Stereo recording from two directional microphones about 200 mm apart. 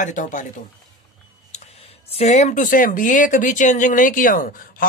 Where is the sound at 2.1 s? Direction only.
35° left (ahead or behind).